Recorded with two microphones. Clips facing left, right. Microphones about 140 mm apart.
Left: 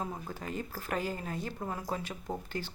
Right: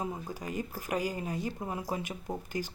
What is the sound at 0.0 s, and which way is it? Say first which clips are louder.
Speech: right 2 dB; 15° right (ahead or behind).